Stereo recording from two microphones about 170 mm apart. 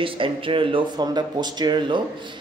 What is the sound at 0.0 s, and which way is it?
A man's voice, 30° right (ahead or behind).